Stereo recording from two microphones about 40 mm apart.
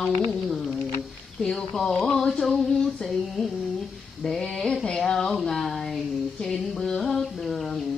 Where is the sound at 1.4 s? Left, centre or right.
Centre.